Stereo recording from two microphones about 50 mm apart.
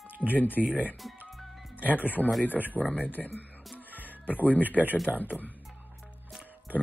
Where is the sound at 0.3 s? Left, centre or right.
Left.